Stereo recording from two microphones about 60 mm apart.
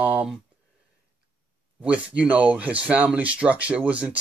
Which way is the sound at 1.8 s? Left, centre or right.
Right.